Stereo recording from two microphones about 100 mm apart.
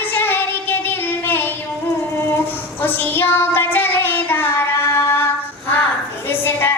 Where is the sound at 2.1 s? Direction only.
25° left (ahead or behind).